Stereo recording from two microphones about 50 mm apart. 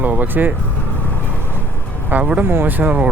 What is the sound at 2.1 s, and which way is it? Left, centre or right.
Speech, right.